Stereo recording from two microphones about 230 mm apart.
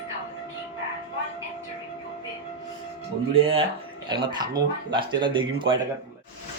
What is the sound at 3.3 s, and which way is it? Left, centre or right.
Speech, right.